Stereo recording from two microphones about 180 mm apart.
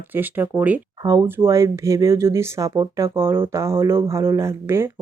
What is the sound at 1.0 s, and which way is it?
Speech, 20° right (ahead or behind).